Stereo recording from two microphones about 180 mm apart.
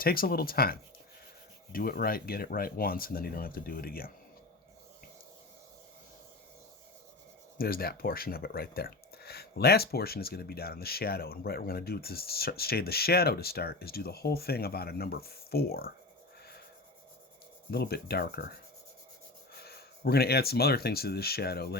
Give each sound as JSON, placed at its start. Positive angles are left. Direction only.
{"t": 0.0, "sound": "speech", "side_deg": 55}
{"t": 7.6, "sound": "speech", "side_deg": 55}
{"t": 17.7, "sound": "speech", "side_deg": 60}
{"t": 19.5, "sound": "speech", "side_deg": 60}